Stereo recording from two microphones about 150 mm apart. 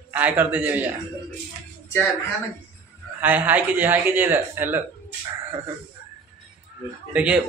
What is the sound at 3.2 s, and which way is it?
A man's voice, 10° right (ahead or behind).